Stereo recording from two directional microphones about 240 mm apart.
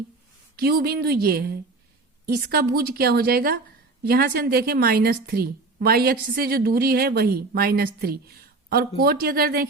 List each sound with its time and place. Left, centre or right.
0.5 s a woman's voice: right